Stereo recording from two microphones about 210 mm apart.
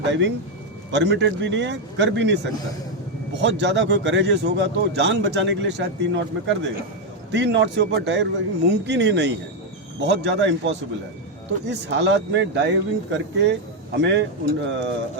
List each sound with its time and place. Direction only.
0.1 s a man's voice: 60° right (ahead or behind)